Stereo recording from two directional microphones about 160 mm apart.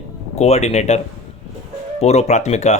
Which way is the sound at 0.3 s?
45° left (ahead or behind).